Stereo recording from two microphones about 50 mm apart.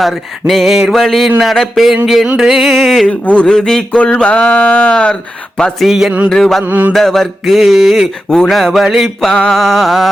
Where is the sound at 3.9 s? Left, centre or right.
Left.